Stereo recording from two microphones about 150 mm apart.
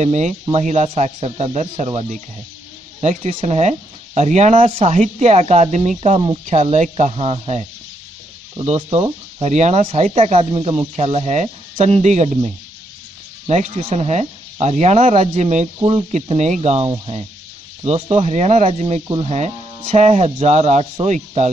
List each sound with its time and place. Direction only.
0.0 s speech: 50° right (ahead or behind)
4.6 s speech: 35° right (ahead or behind)
4.9 s speech: 50° right (ahead or behind)
8.6 s speech: 45° right (ahead or behind)
13.5 s speech: 45° right (ahead or behind)
15.8 s speech: 35° right (ahead or behind)
16.1 s speech: 50° right (ahead or behind)